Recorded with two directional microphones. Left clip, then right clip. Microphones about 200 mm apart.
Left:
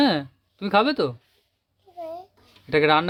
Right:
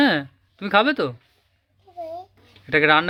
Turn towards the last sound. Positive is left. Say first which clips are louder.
# right 2 dB
turn(degrees=5)  # may be behind; listen again after turning